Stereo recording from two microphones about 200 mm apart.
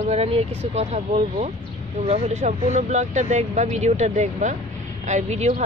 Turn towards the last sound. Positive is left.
turn(degrees=-35)  # may be behind; listen again after turning